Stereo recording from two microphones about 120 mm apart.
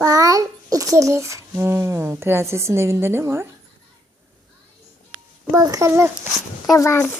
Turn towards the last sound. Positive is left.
turn(degrees=25)  # may be behind; listen again after turning